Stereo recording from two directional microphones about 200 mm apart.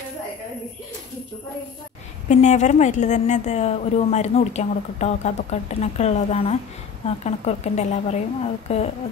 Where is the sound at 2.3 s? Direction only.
35° left (ahead or behind).